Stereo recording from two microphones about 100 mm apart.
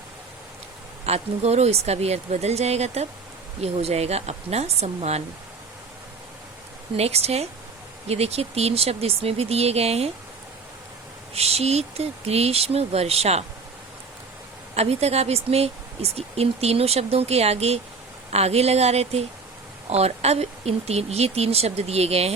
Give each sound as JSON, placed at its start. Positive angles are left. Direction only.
{"t": 1.0, "sound": "speech", "side_deg": -90}
{"t": 6.9, "sound": "speech", "side_deg": -90}
{"t": 11.3, "sound": "speech", "side_deg": -90}
{"t": 14.8, "sound": "speech", "side_deg": -90}